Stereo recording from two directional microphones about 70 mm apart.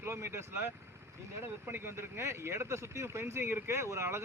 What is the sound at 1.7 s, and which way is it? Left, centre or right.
Speech, right.